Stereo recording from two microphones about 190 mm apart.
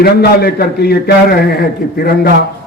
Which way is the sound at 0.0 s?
55° left (ahead or behind).